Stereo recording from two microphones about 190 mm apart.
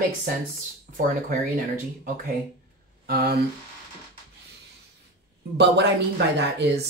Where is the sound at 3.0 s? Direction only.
55° right (ahead or behind).